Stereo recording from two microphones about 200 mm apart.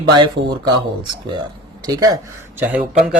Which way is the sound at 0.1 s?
20° right (ahead or behind).